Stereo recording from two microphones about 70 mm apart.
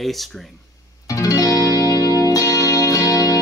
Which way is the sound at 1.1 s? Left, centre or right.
Left.